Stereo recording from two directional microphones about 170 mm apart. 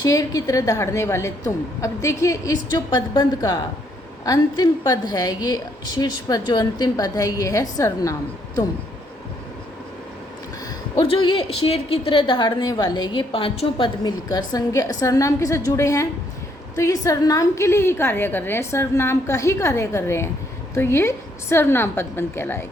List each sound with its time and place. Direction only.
0.0 s a woman's voice: 20° left (ahead or behind)
10.9 s a woman's voice: 30° left (ahead or behind); by 22.6 s 15° left (ahead or behind)